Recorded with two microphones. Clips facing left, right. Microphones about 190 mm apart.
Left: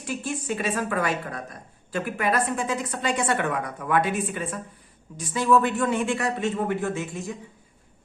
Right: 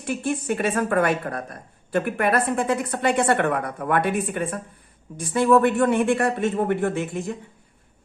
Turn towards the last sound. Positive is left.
turn(degrees=-55)  # may be behind; listen again after turning